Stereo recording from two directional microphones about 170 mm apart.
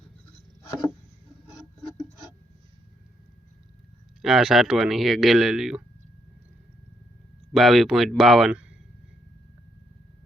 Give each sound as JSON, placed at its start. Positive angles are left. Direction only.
{"t": 0.6, "sound": "chopping", "side_deg": 15}
{"t": 4.2, "sound": "speech", "side_deg": 0}
{"t": 7.5, "sound": "speech", "side_deg": 0}